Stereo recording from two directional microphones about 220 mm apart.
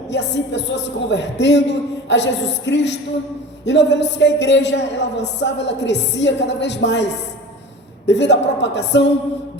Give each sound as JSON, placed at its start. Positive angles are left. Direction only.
{"t": 0.1, "sound": "a woman's voice", "side_deg": 50}